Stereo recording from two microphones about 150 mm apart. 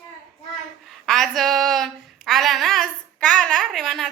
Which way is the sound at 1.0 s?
Centre (ahead or behind).